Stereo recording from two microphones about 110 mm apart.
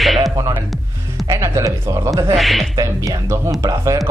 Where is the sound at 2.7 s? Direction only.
30° right (ahead or behind).